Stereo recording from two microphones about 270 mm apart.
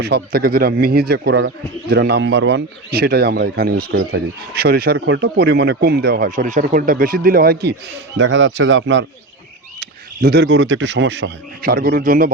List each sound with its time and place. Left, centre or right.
0.0 s speech: right